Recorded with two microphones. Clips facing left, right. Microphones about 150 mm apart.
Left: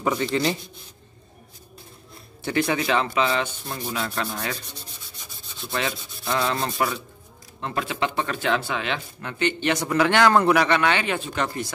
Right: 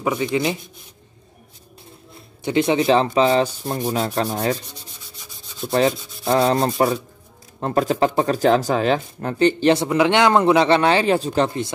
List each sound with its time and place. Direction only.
0.0 s speech: 15° right (ahead or behind)
2.4 s speech: 20° right (ahead or behind)
5.6 s speech: 40° right (ahead or behind)
9.8 s speech: 20° right (ahead or behind)